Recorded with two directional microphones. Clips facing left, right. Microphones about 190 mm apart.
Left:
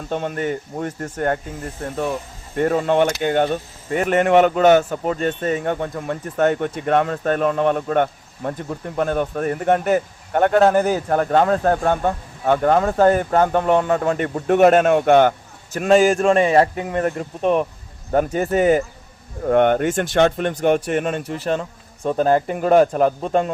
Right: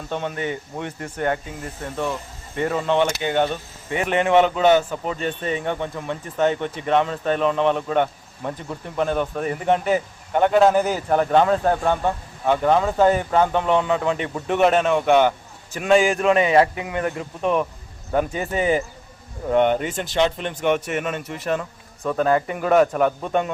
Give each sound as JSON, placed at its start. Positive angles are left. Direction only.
{"t": 0.1, "sound": "a man's voice", "side_deg": 45}
{"t": 2.6, "sound": "a man's voice", "side_deg": 50}
{"t": 15.7, "sound": "a man's voice", "side_deg": 40}